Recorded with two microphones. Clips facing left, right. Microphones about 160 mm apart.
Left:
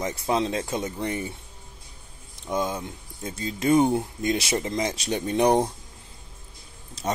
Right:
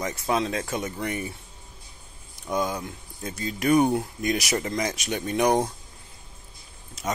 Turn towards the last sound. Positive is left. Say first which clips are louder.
# left 2 dB
turn(degrees=35)  # may be behind; listen again after turning